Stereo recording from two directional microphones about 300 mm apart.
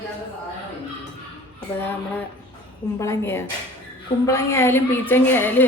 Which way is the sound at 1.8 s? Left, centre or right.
Centre.